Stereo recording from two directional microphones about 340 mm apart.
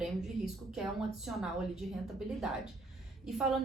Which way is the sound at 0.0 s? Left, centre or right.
Centre.